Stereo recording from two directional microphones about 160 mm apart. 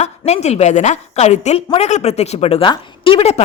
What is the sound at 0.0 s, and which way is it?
A woman's voice, 45° left (ahead or behind).